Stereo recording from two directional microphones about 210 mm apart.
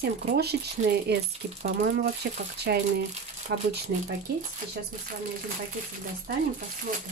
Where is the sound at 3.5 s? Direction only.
55° right (ahead or behind).